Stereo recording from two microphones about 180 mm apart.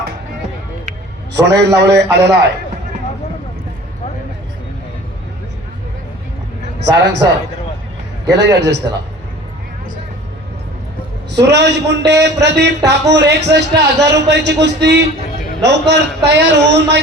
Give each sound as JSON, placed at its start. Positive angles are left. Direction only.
{"t": 1.4, "sound": "a man's voice", "side_deg": -70}
{"t": 6.9, "sound": "a man's voice", "side_deg": -75}
{"t": 8.3, "sound": "a man's voice", "side_deg": -75}
{"t": 11.3, "sound": "a man's voice", "side_deg": -70}